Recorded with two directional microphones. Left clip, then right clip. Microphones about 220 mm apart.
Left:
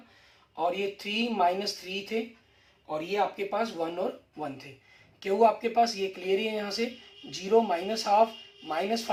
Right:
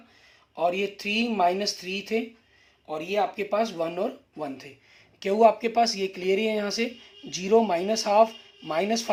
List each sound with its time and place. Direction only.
0.5 s speech: 50° right (ahead or behind)
5.2 s speech: 50° right (ahead or behind)